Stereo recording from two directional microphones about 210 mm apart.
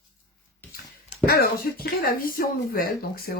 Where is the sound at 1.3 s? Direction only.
45° left (ahead or behind).